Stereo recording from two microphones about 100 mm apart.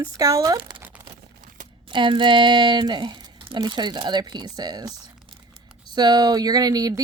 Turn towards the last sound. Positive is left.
turn(degrees=-40)  # may be behind; listen again after turning